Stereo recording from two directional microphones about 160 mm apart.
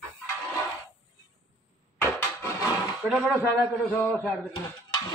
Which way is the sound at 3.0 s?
5° right (ahead or behind).